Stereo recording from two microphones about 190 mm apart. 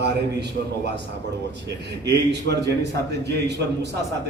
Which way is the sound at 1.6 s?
65° right (ahead or behind).